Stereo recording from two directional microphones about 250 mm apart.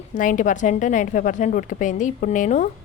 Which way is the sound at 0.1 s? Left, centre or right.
Left.